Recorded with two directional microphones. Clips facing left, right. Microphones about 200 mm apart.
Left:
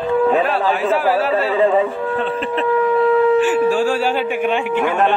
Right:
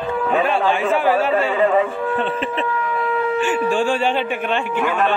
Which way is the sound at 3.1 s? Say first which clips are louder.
Left 6 dB; 40° left (ahead or behind).